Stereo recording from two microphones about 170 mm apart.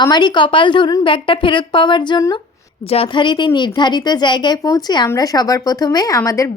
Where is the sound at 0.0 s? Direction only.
25° left (ahead or behind).